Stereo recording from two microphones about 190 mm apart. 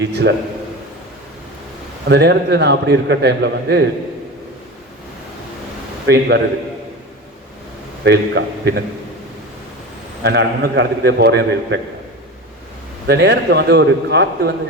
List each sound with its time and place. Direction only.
0.0 s a man's voice: 60° right (ahead or behind)
2.0 s a man's voice: 60° right (ahead or behind)
6.1 s a man's voice: 60° right (ahead or behind)
8.0 s a man's voice: 60° right (ahead or behind)
10.2 s a man's voice: 60° right (ahead or behind)
13.1 s a man's voice: 60° right (ahead or behind)